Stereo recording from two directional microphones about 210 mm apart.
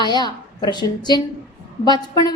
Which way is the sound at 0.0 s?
20° left (ahead or behind).